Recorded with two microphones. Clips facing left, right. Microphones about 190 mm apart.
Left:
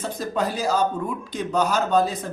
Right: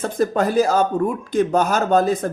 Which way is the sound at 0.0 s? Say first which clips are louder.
Right 6 dB; 50° right (ahead or behind).